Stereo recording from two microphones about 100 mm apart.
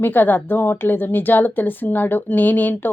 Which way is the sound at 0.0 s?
20° left (ahead or behind).